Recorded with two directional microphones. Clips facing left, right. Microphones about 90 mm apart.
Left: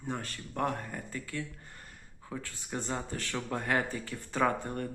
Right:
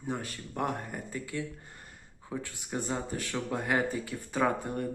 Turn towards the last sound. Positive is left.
turn(degrees=-10)  # may be behind; listen again after turning